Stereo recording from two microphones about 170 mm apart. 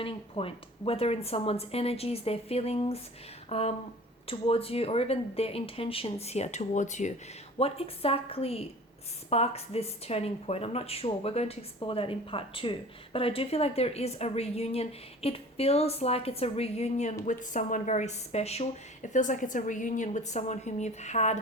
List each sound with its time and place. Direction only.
0.0 s a woman's voice: 35° left (ahead or behind)